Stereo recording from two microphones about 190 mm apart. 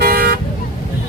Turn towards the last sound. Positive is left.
turn(degrees=-50)  # may be behind; listen again after turning